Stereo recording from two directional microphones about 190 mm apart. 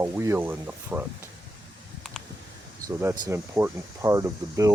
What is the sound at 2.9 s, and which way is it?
Speech, 15° right (ahead or behind).